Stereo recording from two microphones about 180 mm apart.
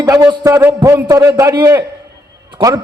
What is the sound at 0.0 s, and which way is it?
A man's voice, 20° right (ahead or behind).